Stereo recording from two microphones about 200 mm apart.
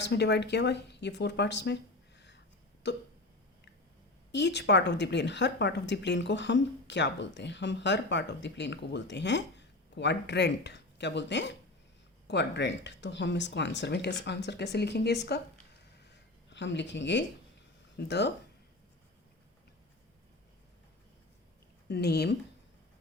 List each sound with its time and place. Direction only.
0.0 s speech: 60° left (ahead or behind)
4.3 s speech: 60° left (ahead or behind)
16.5 s speech: 60° left (ahead or behind)
21.8 s speech: 55° left (ahead or behind)